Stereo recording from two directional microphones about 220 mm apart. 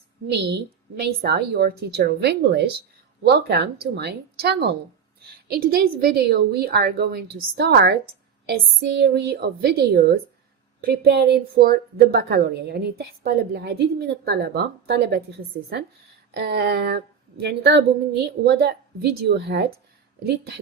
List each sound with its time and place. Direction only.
0.3 s a woman's voice: 50° right (ahead or behind)
16.3 s a woman's voice: 45° right (ahead or behind)